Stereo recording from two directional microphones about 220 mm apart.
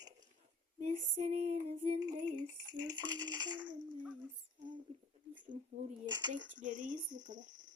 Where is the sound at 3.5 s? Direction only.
5° right (ahead or behind).